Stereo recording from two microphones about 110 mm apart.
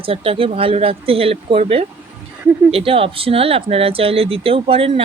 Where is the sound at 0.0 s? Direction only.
60° right (ahead or behind).